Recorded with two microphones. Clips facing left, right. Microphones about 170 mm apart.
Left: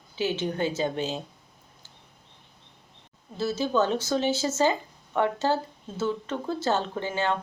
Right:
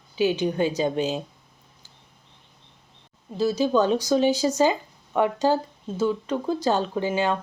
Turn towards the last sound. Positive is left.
turn(degrees=-15)  # may be behind; listen again after turning